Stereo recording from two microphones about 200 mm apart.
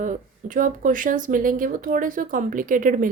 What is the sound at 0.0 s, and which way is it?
Speech, 40° right (ahead or behind).